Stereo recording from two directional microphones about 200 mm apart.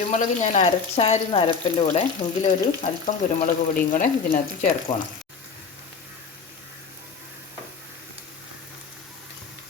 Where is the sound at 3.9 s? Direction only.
40° left (ahead or behind).